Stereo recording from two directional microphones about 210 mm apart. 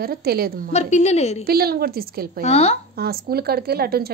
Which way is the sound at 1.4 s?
45° right (ahead or behind).